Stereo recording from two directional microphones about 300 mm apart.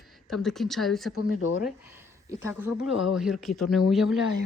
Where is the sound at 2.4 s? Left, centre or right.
Centre.